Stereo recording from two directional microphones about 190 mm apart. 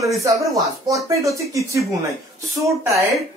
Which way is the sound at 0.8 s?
15° right (ahead or behind).